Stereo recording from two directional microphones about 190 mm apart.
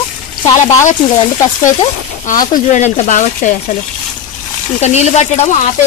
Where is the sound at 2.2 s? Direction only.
45° left (ahead or behind).